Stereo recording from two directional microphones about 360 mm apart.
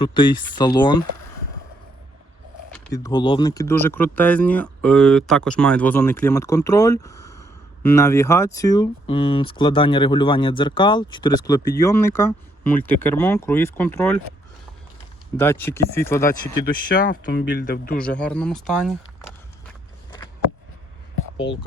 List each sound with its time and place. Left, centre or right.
0.0 s speech: centre
2.7 s speech: centre
15.4 s speech: centre
16.6 s speech: left
18.0 s speech: centre
21.5 s speech: centre